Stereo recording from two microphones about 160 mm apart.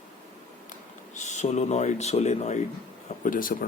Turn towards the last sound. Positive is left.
turn(degrees=60)  # may be behind; listen again after turning